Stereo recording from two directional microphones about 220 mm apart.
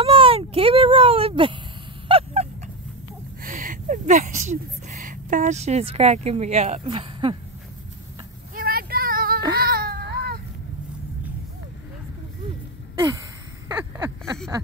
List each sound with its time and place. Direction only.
0.0 s baby cry: 25° right (ahead or behind)
2.0 s honk: 25° right (ahead or behind)
3.4 s speech: 40° right (ahead or behind)
8.5 s child singing: 40° right (ahead or behind)
9.6 s baby cry: 45° right (ahead or behind)
13.7 s a sound: 15° right (ahead or behind)